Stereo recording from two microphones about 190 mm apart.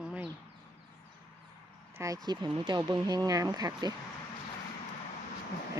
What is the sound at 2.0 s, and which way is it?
Speech, 20° right (ahead or behind).